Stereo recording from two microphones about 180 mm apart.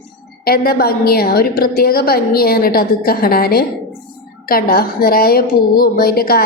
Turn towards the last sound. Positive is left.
turn(degrees=55)  # may be behind; listen again after turning